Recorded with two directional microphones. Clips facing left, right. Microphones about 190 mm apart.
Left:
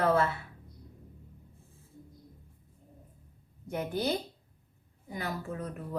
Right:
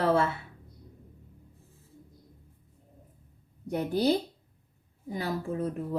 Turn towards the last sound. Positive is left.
turn(degrees=-30)  # may be behind; listen again after turning